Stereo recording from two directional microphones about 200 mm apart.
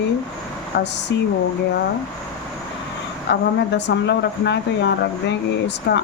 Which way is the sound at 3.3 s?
60° left (ahead or behind).